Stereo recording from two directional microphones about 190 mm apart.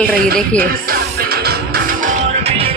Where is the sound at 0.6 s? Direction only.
50° right (ahead or behind).